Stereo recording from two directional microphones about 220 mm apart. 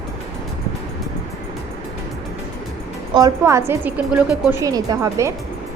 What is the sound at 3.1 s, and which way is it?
A woman's voice, 15° right (ahead or behind).